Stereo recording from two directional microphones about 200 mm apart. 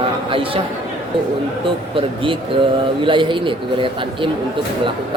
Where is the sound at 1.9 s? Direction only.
25° right (ahead or behind).